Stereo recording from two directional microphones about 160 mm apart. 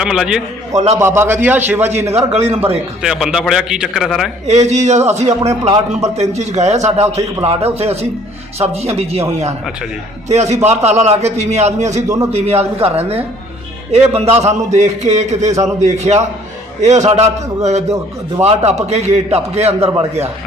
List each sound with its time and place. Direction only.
0.0 s a man's voice: 5° right (ahead or behind)
0.9 s a man's voice: 15° right (ahead or behind)
2.1 s a man's voice: 40° right (ahead or behind)
3.0 s a man's voice: 5° right (ahead or behind)
4.4 s a man's voice: 45° right (ahead or behind)
10.2 s a man's voice: 45° right (ahead or behind)
12.0 s a man's voice: 20° right (ahead or behind)
12.3 s a man's voice: 40° right (ahead or behind)